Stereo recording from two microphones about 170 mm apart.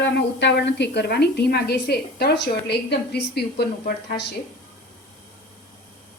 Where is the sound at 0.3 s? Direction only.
90° left; by 3.9 s 70° left (ahead or behind).